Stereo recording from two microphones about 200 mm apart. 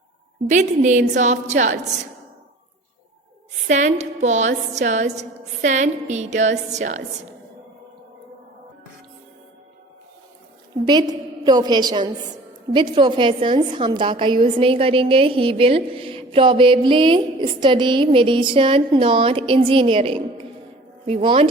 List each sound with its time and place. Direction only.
0.5 s a woman's voice: 35° right (ahead or behind)
3.7 s a woman's voice: 35° right (ahead or behind)
10.8 s a woman's voice: 20° right (ahead or behind)